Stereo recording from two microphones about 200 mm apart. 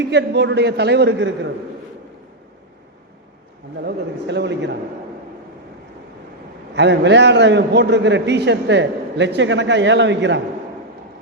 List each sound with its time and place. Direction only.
0.0 s a man's voice: 60° right (ahead or behind)
3.8 s a man's voice: 60° right (ahead or behind)
6.7 s a man's voice: 60° right (ahead or behind)